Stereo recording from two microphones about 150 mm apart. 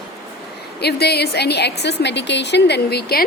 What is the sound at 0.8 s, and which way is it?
Speech, 90° left.